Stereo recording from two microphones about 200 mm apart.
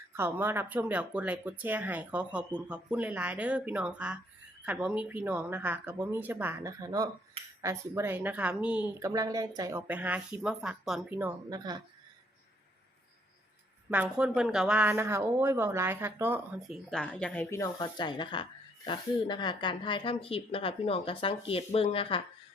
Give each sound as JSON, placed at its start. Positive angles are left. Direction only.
{"t": 0.1, "sound": "speech", "side_deg": -10}
{"t": 11.4, "sound": "speech", "side_deg": -20}
{"t": 13.9, "sound": "a woman's voice", "side_deg": -5}